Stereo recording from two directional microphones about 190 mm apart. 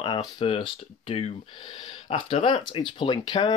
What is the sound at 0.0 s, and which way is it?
Speech, 25° left (ahead or behind).